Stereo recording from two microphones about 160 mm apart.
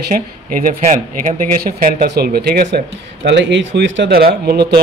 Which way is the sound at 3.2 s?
90° right.